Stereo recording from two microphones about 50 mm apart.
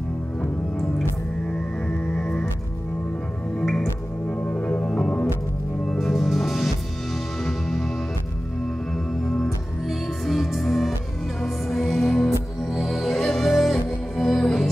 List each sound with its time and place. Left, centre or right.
2.1 s music: centre
4.3 s music: left
5.9 s music: centre
8.9 s music: centre